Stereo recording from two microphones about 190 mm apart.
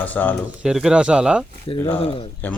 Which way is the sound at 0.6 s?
5° right (ahead or behind).